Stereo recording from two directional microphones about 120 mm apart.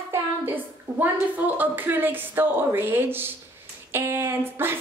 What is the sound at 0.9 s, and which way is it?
A woman's voice, 15° right (ahead or behind).